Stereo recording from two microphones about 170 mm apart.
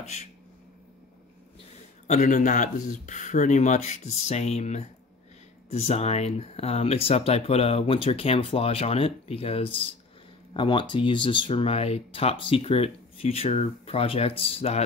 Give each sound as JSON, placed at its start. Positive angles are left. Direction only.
{"t": 2.0, "sound": "speech", "side_deg": 45}